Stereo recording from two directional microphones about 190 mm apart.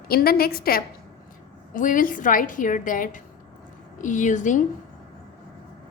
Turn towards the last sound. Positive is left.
turn(degrees=40)  # may be behind; listen again after turning